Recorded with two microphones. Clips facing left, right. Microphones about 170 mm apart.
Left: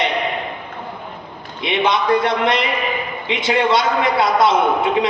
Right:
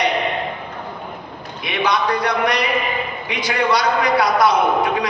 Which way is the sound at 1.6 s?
25° left (ahead or behind).